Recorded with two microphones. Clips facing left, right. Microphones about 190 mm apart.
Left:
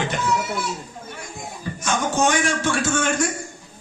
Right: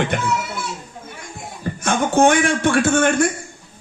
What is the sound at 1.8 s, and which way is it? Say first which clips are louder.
A man's voice: right 6 dB; 55° right (ahead or behind).